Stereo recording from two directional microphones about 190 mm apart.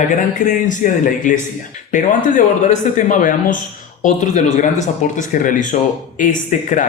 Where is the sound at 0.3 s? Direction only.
45° left (ahead or behind).